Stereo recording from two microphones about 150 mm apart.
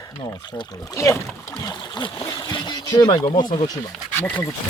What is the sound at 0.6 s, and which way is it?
Speech, 20° left (ahead or behind).